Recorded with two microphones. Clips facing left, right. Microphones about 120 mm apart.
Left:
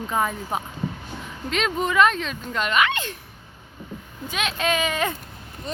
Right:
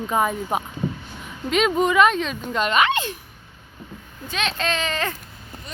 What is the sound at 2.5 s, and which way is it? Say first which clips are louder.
Speech: right 2 dB; 25° right (ahead or behind).